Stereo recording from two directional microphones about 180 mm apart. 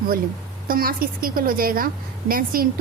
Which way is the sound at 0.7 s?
55° right (ahead or behind).